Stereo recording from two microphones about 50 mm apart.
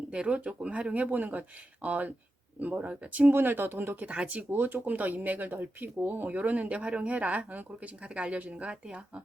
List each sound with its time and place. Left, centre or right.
0.1 s speech: centre
0.9 s speech: right
3.3 s speech: right
4.0 s speech: right
4.5 s speech: right; by 9.2 s centre